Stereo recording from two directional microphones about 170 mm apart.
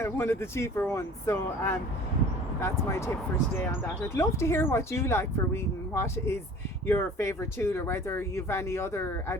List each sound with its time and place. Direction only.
0.0 s speech: 15° left (ahead or behind)